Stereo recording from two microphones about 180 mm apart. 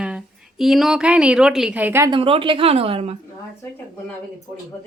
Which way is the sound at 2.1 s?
30° right (ahead or behind).